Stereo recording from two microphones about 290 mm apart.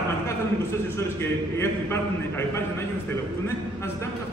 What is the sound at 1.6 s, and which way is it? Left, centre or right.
A man's voice, centre.